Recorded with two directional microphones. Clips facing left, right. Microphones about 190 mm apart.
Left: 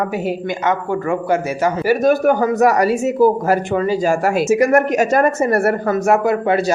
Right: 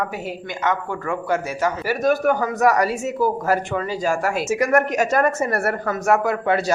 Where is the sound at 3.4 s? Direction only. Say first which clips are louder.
Left 5 dB; 25° left (ahead or behind).